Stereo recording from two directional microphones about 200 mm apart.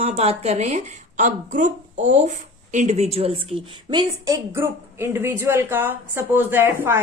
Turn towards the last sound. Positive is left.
turn(degrees=-10)  # may be behind; listen again after turning